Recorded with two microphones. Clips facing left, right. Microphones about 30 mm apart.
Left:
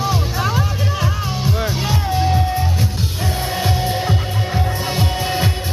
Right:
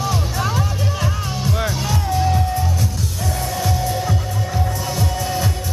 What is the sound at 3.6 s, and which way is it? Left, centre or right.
Music, left.